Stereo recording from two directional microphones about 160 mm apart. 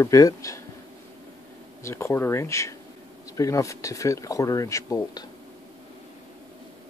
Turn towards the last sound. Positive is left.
turn(degrees=25)  # may be behind; listen again after turning